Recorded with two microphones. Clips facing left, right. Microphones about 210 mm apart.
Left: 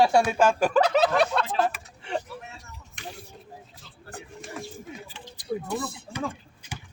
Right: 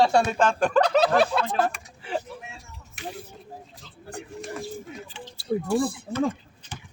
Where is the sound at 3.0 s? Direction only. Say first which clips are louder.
Right 4 dB; 5° right (ahead or behind).